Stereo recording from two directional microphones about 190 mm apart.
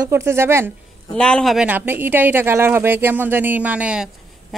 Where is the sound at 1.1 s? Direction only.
5° left (ahead or behind).